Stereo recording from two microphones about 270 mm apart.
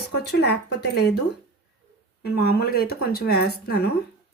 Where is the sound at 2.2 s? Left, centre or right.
Left.